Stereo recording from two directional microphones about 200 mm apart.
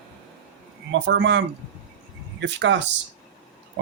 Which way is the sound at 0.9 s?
65° right (ahead or behind).